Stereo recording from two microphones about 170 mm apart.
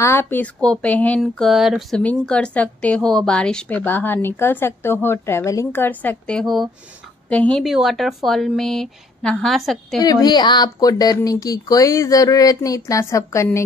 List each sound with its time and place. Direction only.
0.0 s speech: 15° left (ahead or behind)
9.9 s speech: 25° left (ahead or behind)